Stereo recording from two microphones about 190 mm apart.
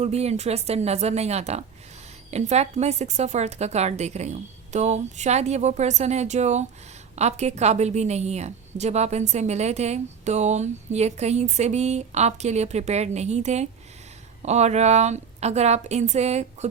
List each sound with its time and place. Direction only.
0.0 s a woman's voice: 35° right (ahead or behind)